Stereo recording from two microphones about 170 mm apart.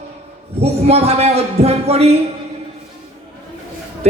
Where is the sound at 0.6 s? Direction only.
40° right (ahead or behind).